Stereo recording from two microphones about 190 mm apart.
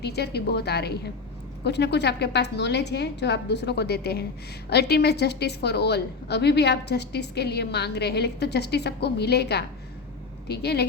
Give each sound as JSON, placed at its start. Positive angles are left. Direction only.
{"t": 0.0, "sound": "a woman's voice", "side_deg": 60}